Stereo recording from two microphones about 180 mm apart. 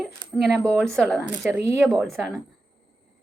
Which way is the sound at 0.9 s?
Centre (ahead or behind).